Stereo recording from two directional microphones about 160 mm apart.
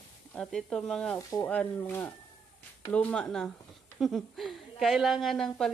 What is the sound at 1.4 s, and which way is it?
Speech, 10° left (ahead or behind).